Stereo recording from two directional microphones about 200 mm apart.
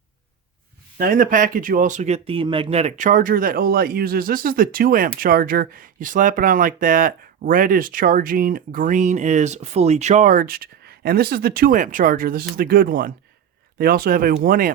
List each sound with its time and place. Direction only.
0.9 s speech: 45° right (ahead or behind)